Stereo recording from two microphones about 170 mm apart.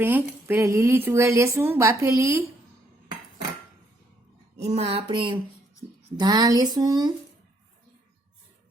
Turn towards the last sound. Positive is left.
turn(degrees=-25)  # may be behind; listen again after turning